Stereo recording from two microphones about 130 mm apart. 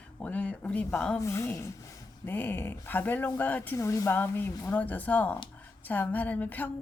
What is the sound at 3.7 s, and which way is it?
A woman's voice, 25° left (ahead or behind).